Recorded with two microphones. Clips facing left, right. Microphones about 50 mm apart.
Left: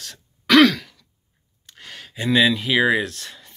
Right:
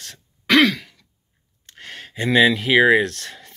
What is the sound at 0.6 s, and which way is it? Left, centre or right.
Throat clearing, centre.